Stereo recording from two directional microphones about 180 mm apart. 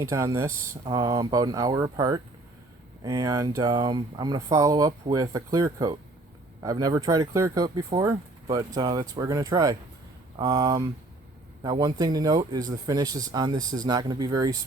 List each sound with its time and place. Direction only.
0.0 s speech: 15° right (ahead or behind)